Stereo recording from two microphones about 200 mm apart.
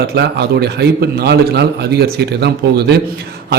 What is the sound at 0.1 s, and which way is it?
A man's voice, 55° right (ahead or behind).